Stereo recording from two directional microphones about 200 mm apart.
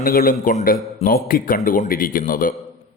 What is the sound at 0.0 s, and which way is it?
Speech, 45° left (ahead or behind).